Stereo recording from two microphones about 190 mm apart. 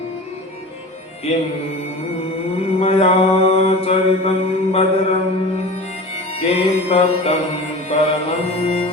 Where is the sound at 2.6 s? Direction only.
30° left (ahead or behind).